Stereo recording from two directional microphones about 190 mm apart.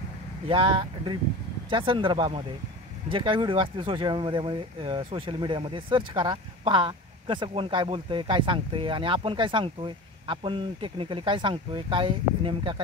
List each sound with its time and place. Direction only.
0.5 s speech: 25° right (ahead or behind)